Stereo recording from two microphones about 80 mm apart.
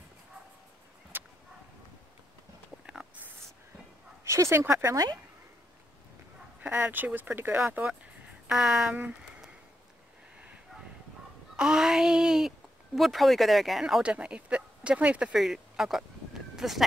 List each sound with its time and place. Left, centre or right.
1.1 s a sound: right
4.2 s speech: right
4.8 s speech: right
6.6 s speech: right
8.5 s speech: centre
11.5 s speech: centre
14.0 s speech: centre
15.3 s speech: centre